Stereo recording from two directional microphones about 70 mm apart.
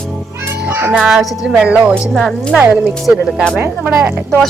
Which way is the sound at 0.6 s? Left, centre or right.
Right.